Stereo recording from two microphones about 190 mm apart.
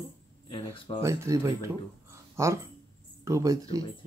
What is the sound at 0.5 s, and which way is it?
Speech, 25° left (ahead or behind).